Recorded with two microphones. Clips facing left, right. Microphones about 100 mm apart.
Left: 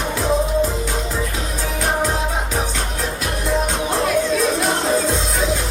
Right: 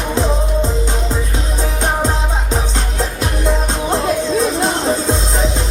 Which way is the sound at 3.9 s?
30° right (ahead or behind).